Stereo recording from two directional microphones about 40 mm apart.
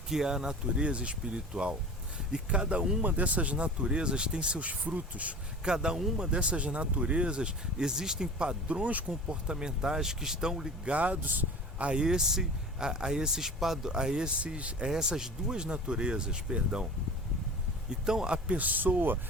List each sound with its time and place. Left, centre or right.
0.1 s speech: centre
0.8 s speech: right
3.0 s speech: right
5.6 s speech: right
9.0 s speech: right
10.8 s speech: right
11.9 s speech: centre
13.9 s speech: right
14.8 s speech: centre
18.0 s speech: centre
18.4 s speech: right